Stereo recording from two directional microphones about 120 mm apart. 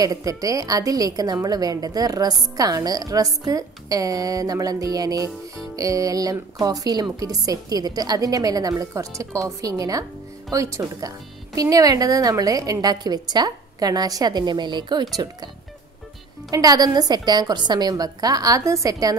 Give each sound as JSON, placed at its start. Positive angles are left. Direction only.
{"t": 0.0, "sound": "a woman's voice", "side_deg": -30}
{"t": 16.4, "sound": "speech", "side_deg": -30}